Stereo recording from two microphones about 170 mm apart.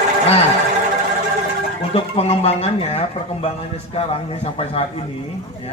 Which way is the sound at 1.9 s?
35° left (ahead or behind).